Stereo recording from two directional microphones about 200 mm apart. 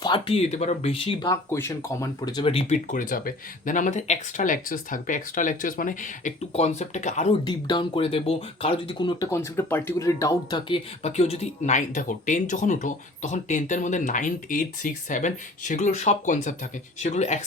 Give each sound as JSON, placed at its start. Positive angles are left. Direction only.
{"t": 0.0, "sound": "speech", "side_deg": 25}
{"t": 2.9, "sound": "speech", "side_deg": 40}
{"t": 7.4, "sound": "speech", "side_deg": 20}
{"t": 11.0, "sound": "speech", "side_deg": 35}